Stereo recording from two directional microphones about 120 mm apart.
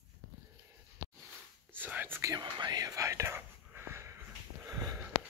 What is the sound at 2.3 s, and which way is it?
Speech, 35° right (ahead or behind).